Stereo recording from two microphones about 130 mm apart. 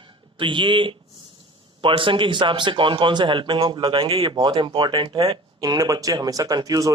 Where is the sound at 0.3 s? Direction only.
40° right (ahead or behind).